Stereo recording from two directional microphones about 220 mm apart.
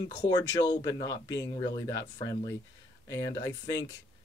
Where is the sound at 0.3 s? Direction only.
20° left (ahead or behind).